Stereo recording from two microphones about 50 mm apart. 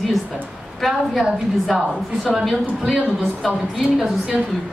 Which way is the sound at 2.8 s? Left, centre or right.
Centre.